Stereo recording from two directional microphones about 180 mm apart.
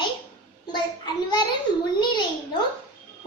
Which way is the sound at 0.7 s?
25° left (ahead or behind).